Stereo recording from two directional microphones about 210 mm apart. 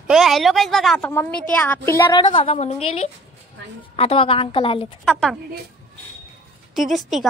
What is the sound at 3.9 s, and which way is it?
Speech, 25° left (ahead or behind).